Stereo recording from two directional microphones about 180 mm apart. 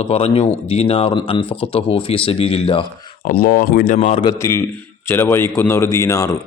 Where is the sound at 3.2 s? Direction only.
55° left (ahead or behind).